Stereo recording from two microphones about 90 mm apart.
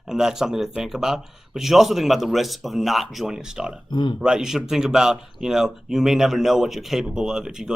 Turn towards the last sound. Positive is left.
turn(degrees=-5)  # may be behind; listen again after turning